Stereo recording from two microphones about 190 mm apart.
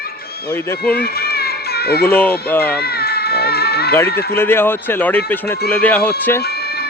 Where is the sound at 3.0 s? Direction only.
55° left (ahead or behind).